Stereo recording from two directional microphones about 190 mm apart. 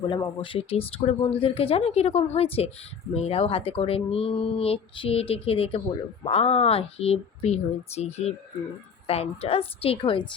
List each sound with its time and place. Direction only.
0.1 s a woman's voice: 25° left (ahead or behind)